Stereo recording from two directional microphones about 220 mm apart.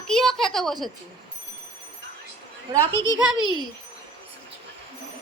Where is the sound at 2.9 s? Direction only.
15° left (ahead or behind).